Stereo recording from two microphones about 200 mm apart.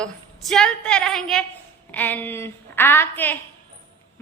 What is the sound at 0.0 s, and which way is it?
A woman's voice, 5° left (ahead or behind).